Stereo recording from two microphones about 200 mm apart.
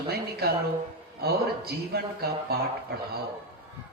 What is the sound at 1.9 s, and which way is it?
Speech, 50° right (ahead or behind).